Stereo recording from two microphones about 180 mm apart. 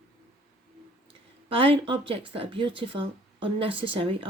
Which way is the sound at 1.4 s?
30° right (ahead or behind).